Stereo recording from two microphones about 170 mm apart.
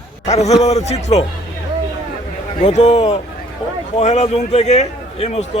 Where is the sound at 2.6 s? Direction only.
45° left (ahead or behind).